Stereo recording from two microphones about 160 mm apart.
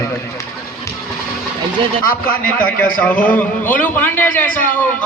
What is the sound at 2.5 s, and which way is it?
A man's voice, 10° left (ahead or behind).